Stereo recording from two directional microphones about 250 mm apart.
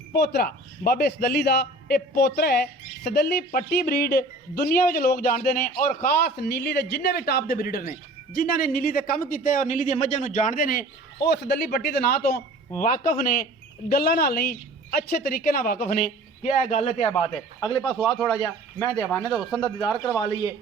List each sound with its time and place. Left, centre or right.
0.1 s a man's voice: left; by 20.5 s centre